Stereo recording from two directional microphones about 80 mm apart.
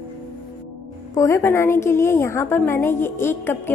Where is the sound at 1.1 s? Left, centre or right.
Left.